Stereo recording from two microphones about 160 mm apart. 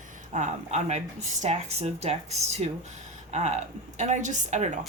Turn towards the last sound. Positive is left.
turn(degrees=-50)  # may be behind; listen again after turning